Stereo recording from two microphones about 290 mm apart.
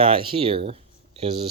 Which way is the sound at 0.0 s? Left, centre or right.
Centre.